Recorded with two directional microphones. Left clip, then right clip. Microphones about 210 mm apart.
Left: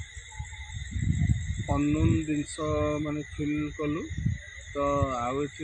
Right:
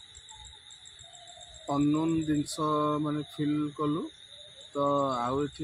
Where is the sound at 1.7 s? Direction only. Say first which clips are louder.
Even; 20° right (ahead or behind).